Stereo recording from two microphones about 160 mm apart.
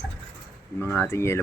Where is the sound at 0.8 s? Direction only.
15° left (ahead or behind).